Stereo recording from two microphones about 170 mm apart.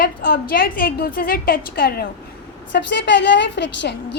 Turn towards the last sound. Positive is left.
turn(degrees=90)